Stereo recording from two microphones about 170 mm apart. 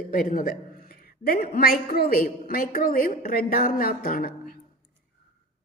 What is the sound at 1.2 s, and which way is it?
A woman's voice, 60° left (ahead or behind).